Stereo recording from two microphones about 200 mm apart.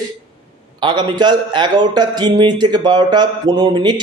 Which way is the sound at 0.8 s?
20° right (ahead or behind).